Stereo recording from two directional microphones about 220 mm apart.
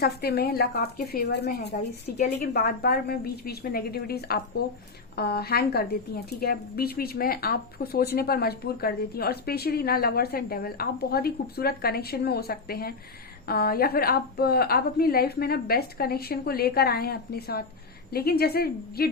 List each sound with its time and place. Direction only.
0.0 s a woman's voice: 45° left (ahead or behind)